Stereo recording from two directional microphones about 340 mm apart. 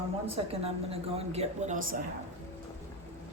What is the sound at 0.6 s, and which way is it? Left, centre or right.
Speech, centre.